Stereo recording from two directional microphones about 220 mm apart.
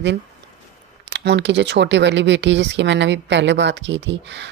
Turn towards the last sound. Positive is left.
turn(degrees=-55)  # may be behind; listen again after turning